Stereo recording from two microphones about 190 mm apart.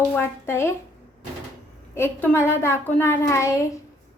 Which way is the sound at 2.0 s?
10° left (ahead or behind).